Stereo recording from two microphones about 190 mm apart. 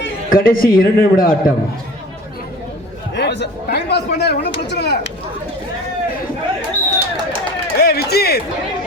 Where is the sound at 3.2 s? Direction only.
65° left (ahead or behind).